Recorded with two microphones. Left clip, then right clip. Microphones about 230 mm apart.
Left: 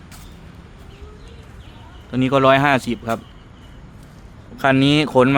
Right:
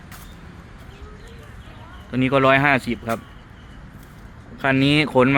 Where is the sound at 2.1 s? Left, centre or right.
Centre.